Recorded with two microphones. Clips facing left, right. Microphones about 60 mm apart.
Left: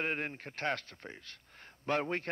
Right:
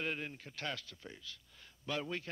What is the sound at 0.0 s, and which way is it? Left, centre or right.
A man's voice, left.